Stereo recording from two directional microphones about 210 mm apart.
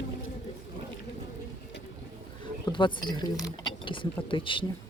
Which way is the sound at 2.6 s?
20° left (ahead or behind).